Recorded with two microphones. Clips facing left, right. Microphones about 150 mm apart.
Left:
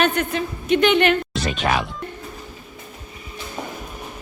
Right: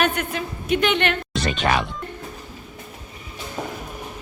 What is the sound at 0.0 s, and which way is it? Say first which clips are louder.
A woman's voice: left 3 dB; 5° right (ahead or behind).